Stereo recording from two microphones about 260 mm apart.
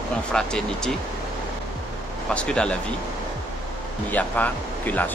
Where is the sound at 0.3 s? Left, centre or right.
Centre.